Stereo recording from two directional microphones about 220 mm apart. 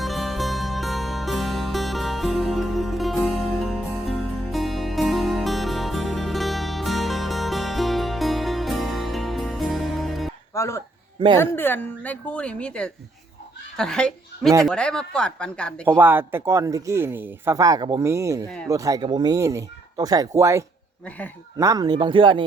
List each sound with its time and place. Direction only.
0.0 s music: centre (ahead or behind)
10.5 s music: 15° left (ahead or behind)
11.3 s a woman's voice: 10° left (ahead or behind)
15.9 s speech: 10° right (ahead or behind)